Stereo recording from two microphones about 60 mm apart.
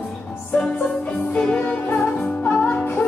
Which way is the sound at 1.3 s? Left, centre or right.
Centre.